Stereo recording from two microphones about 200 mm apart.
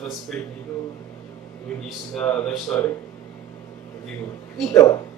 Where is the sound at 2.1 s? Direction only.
5° left (ahead or behind).